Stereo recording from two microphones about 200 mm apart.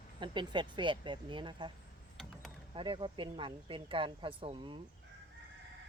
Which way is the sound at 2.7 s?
25° right (ahead or behind).